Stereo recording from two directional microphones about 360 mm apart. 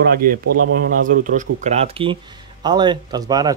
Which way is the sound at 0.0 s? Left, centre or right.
Right.